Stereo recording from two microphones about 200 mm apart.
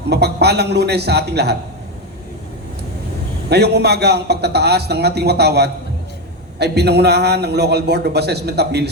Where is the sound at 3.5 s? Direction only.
55° right (ahead or behind).